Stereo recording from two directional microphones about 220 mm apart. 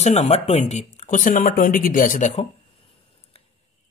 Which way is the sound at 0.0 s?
30° left (ahead or behind).